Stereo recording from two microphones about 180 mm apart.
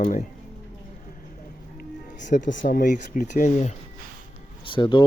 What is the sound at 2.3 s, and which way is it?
Speech, 45° left (ahead or behind).